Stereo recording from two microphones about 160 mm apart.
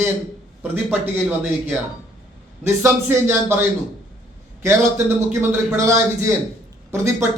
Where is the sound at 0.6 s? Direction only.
10° right (ahead or behind).